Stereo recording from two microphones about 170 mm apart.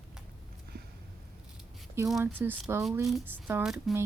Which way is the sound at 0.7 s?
60° right (ahead or behind).